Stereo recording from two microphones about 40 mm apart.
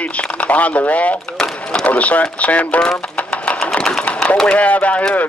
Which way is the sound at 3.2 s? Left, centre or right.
Left.